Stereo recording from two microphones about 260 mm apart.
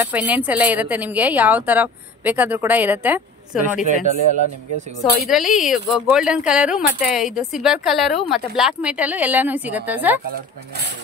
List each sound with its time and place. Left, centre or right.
0.0 s a woman's voice: centre
3.8 s speech: right
5.3 s speech: centre